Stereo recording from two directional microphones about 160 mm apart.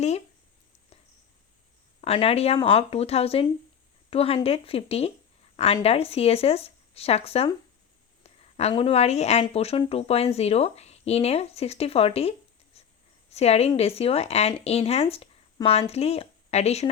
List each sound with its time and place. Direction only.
2.0 s speech: 40° left (ahead or behind)
8.2 s a sound: 40° left (ahead or behind)
8.7 s speech: 40° left (ahead or behind)
12.7 s writing: 40° left (ahead or behind)
13.3 s speech: 40° left (ahead or behind)